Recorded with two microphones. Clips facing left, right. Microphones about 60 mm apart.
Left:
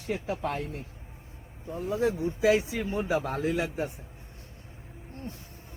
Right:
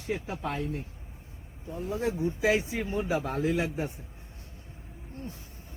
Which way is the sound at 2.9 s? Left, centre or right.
Left.